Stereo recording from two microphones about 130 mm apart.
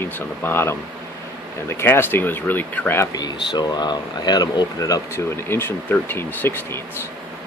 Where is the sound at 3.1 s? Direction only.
30° left (ahead or behind); by 6.8 s 15° left (ahead or behind).